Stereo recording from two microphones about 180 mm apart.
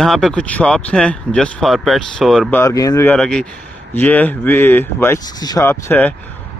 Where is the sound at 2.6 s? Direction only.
20° left (ahead or behind).